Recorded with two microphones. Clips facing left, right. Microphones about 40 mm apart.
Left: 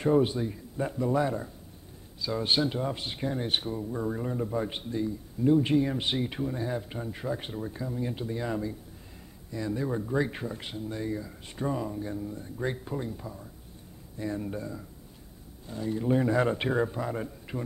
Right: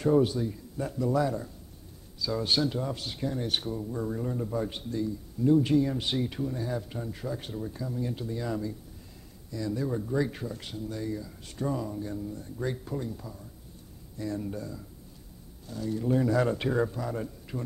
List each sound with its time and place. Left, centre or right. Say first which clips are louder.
0.0 s a man's voice: even; left